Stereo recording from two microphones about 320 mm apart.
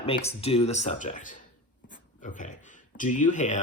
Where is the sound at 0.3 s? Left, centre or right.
Centre.